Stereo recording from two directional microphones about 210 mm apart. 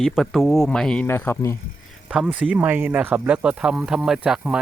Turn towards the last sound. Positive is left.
turn(degrees=-5)  # may be behind; listen again after turning